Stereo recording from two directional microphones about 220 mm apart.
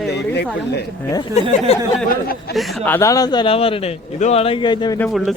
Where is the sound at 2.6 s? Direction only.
Centre (ahead or behind); by 4.9 s 20° left (ahead or behind).